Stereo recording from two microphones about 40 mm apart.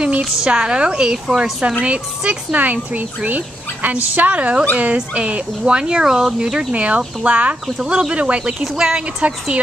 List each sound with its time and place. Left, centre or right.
0.5 s speech: right
1.8 s speech: right
2.6 s speech: right; by 6.7 s centre
6.7 s speech: right
7.6 s speech: centre
8.1 s speech: right